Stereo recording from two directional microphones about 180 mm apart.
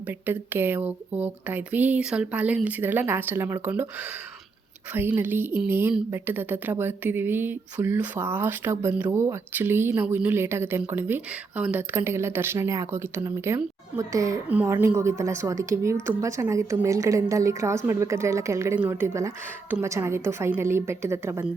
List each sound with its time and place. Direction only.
0.0 s a woman's voice: 10° right (ahead or behind)